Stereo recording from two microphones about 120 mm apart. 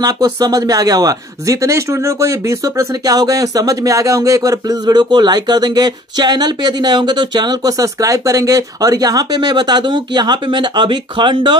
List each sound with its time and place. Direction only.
0.0 s speech: 30° right (ahead or behind)